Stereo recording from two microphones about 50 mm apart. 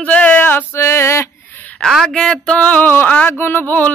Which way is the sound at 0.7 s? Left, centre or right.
Left.